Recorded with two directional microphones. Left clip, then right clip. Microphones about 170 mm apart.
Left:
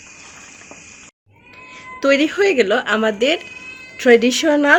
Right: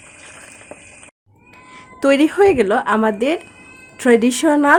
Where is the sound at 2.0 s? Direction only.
70° right (ahead or behind).